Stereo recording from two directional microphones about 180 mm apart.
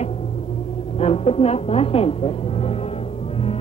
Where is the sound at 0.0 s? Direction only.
35° left (ahead or behind).